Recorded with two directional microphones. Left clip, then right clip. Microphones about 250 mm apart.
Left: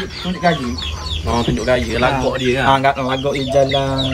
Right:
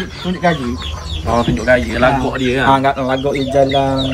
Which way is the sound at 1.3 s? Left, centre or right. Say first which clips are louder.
Right 4 dB; centre.